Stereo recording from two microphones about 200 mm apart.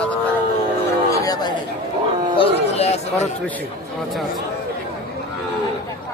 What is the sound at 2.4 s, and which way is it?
Speech, 30° left (ahead or behind).